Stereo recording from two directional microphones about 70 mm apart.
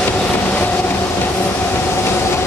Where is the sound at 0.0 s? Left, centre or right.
Left.